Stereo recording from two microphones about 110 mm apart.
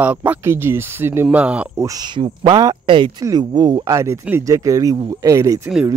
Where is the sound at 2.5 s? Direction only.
35° right (ahead or behind).